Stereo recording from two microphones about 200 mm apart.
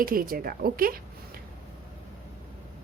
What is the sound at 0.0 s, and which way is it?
A woman's voice, 45° right (ahead or behind).